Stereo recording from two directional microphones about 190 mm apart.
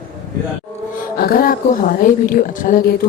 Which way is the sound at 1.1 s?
50° left (ahead or behind).